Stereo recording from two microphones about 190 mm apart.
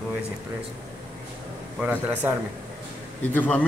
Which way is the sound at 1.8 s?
10° right (ahead or behind).